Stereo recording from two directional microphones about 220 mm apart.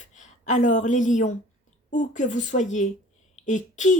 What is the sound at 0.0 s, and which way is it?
A woman's voice, 35° left (ahead or behind).